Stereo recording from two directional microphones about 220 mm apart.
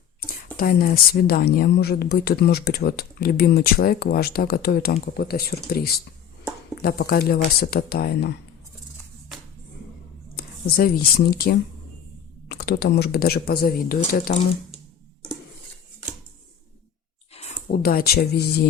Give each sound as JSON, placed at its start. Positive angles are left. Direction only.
{"t": 0.5, "sound": "a woman's voice", "side_deg": 40}
{"t": 10.3, "sound": "a woman's voice", "side_deg": 40}
{"t": 17.7, "sound": "a woman's voice", "side_deg": 45}